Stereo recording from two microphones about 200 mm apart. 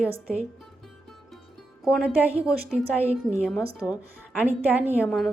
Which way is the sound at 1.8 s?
5° right (ahead or behind).